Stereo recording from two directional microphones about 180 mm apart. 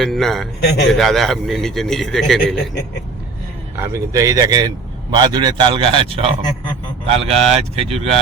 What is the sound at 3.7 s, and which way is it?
A man's voice, 15° right (ahead or behind).